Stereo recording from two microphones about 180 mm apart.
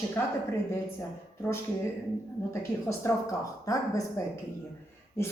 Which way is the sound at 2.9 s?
15° left (ahead or behind).